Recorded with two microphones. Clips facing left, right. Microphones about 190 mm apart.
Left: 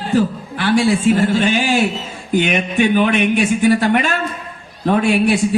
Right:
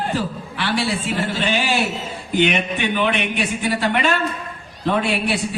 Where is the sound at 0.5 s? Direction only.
45° left (ahead or behind).